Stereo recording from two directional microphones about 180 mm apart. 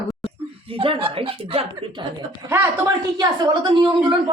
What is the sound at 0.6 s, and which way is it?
Speech, 30° right (ahead or behind).